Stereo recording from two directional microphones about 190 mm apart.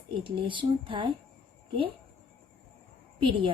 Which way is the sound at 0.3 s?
25° right (ahead or behind).